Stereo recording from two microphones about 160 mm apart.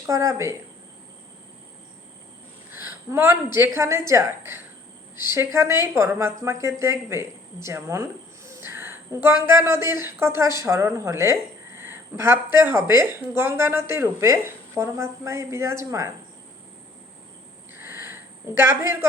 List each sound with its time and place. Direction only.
0.0 s speech: 20° right (ahead or behind)
2.7 s a woman's voice: 15° right (ahead or behind)
18.5 s a woman's voice: 20° right (ahead or behind)